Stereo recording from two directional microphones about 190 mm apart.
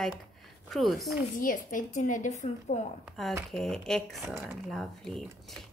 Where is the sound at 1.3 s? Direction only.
45° left (ahead or behind).